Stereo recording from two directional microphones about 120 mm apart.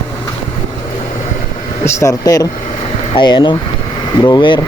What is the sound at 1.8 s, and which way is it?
Speech, 25° left (ahead or behind).